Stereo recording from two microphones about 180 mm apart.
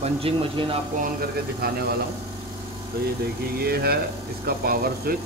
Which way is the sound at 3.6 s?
60° right (ahead or behind).